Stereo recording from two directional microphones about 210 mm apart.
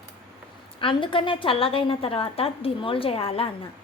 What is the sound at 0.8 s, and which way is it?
A woman's voice, 25° left (ahead or behind).